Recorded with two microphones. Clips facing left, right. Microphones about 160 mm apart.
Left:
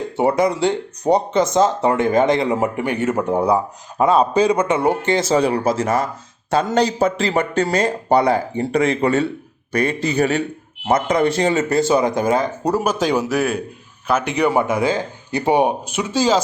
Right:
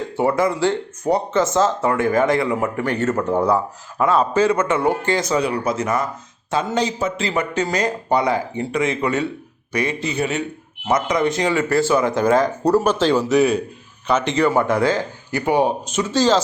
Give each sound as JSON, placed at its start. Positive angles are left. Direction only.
{"t": 0.2, "sound": "a man's voice", "side_deg": 15}
{"t": 15.9, "sound": "speech", "side_deg": 10}